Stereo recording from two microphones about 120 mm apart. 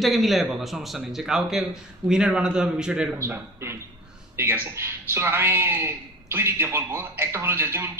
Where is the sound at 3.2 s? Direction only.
20° right (ahead or behind).